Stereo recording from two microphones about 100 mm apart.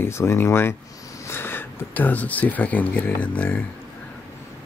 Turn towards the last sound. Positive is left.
turn(degrees=15)  # may be behind; listen again after turning